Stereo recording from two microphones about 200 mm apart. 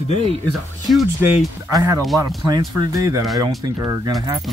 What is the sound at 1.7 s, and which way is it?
Speech, 15° right (ahead or behind).